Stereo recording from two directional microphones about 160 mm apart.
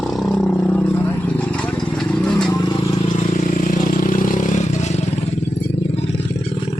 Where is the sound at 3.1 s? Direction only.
50° left (ahead or behind).